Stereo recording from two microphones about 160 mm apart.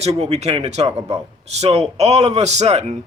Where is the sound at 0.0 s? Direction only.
40° right (ahead or behind).